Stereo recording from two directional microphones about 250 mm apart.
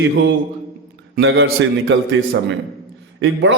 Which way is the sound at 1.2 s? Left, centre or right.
Right.